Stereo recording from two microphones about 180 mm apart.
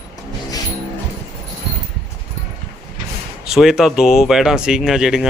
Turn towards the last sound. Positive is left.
turn(degrees=0)  # may be behind; listen again after turning